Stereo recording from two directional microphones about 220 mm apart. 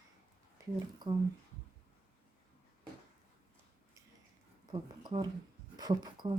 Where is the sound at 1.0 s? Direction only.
20° right (ahead or behind).